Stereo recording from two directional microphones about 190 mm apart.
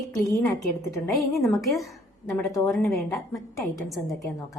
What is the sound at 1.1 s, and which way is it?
A woman's voice, centre (ahead or behind).